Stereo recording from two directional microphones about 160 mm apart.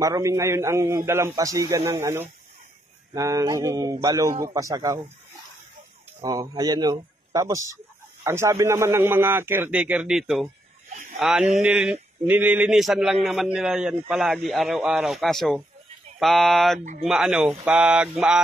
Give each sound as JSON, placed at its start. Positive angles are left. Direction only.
{"t": 0.0, "sound": "a man's voice", "side_deg": -20}
{"t": 6.1, "sound": "a man's voice", "side_deg": -20}